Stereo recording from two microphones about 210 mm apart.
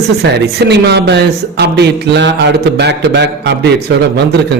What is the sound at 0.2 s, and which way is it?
Speech, 55° right (ahead or behind).